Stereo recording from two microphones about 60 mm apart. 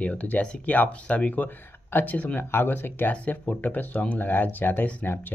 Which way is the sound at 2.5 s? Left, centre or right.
Left.